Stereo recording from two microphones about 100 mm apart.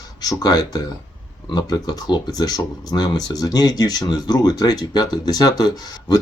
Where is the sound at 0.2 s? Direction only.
40° left (ahead or behind).